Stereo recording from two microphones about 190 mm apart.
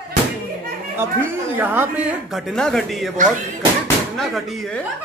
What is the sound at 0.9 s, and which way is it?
Speech, 10° right (ahead or behind).